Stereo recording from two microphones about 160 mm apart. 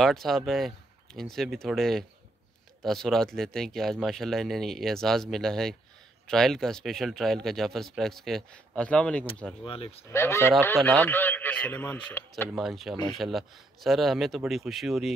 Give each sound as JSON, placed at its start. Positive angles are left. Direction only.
{"t": 0.0, "sound": "speech", "side_deg": 0}
{"t": 9.7, "sound": "speech", "side_deg": 40}
{"t": 10.0, "sound": "a man's voice", "side_deg": 15}
{"t": 12.5, "sound": "speech", "side_deg": 0}